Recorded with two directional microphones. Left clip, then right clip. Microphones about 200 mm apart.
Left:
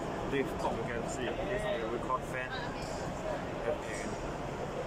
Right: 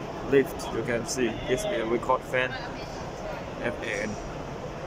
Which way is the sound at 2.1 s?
55° right (ahead or behind).